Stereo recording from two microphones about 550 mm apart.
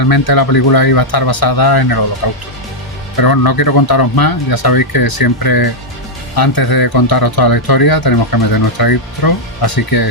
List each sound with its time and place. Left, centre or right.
0.0 s speech: left
3.2 s speech: left